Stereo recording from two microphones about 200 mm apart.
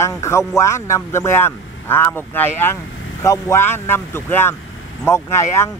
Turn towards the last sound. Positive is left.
turn(degrees=15)  # may be behind; listen again after turning